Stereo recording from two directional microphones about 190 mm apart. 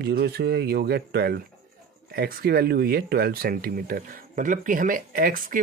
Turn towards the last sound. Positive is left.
turn(degrees=-45)  # may be behind; listen again after turning